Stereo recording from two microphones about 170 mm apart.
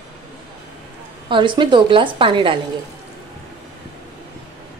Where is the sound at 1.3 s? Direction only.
30° right (ahead or behind).